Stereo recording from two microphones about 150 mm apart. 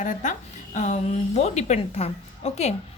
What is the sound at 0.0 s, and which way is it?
A woman's voice, 60° left (ahead or behind).